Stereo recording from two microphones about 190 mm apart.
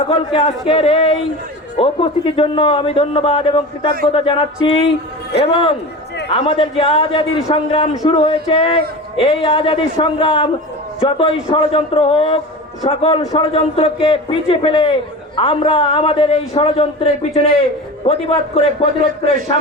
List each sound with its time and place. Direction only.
0.1 s a man's voice: 25° left (ahead or behind)
7.9 s a man's voice: 20° left (ahead or behind)
8.2 s a man's voice: 30° left (ahead or behind)